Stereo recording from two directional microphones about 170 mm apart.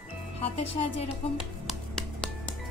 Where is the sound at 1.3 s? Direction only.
Centre (ahead or behind).